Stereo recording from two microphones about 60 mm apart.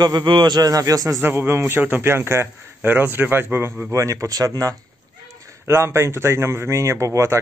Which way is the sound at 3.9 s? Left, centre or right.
Right.